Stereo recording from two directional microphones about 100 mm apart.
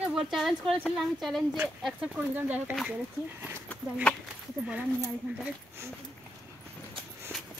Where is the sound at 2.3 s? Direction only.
20° right (ahead or behind).